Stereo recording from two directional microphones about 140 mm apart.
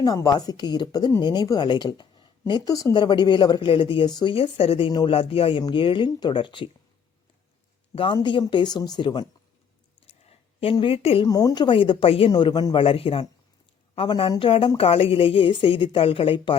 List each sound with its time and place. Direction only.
0.0 s a woman's voice: 25° left (ahead or behind)
7.9 s a woman's voice: 35° left (ahead or behind)
10.1 s a sound: 45° left (ahead or behind)
11.3 s a woman's voice: 25° left (ahead or behind)